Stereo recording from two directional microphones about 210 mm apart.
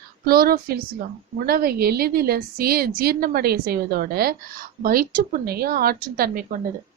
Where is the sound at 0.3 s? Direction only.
45° right (ahead or behind).